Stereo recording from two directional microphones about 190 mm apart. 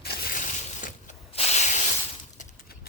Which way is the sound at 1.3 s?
35° left (ahead or behind).